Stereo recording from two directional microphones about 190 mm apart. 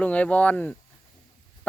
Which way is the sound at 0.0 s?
5° left (ahead or behind).